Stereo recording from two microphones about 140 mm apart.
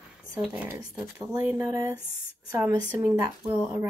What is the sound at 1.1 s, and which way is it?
Speech, 15° right (ahead or behind).